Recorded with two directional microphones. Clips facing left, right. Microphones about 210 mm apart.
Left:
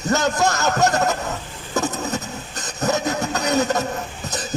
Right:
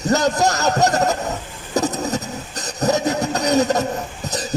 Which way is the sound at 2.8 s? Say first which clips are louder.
Right 3 dB; 35° right (ahead or behind).